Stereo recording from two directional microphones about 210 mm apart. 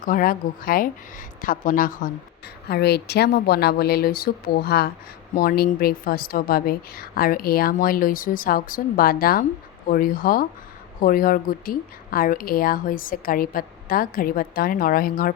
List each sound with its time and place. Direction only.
0.0 s speech: 40° left (ahead or behind)